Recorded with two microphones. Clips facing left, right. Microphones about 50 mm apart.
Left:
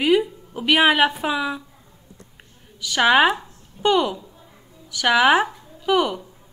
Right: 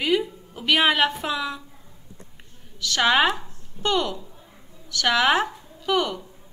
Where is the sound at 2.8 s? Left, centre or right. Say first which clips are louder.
Left 4 dB; centre.